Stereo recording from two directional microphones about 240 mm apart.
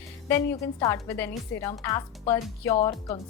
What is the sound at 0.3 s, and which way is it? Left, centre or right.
A woman's voice, centre.